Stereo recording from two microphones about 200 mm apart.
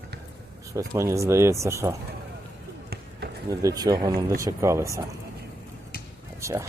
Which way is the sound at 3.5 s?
20° right (ahead or behind).